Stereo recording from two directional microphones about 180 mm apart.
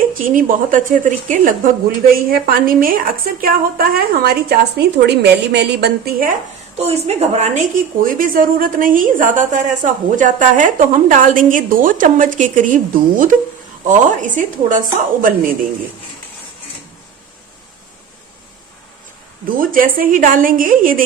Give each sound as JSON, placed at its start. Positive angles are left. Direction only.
{"t": 0.1, "sound": "a woman's voice", "side_deg": -50}
{"t": 6.7, "sound": "a woman's voice", "side_deg": -35}
{"t": 8.0, "sound": "a woman's voice", "side_deg": -50}
{"t": 19.5, "sound": "a woman's voice", "side_deg": -50}